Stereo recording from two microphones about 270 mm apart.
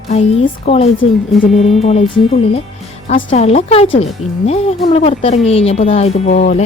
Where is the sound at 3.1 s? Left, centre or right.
Left.